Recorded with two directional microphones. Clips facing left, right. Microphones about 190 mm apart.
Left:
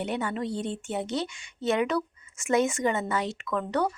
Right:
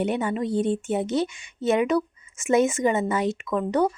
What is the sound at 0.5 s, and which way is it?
Speech, 55° right (ahead or behind).